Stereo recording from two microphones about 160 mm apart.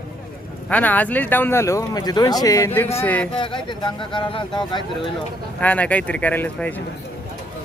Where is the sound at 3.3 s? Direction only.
30° left (ahead or behind).